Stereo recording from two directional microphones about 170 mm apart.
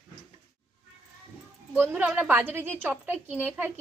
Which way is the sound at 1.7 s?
10° right (ahead or behind).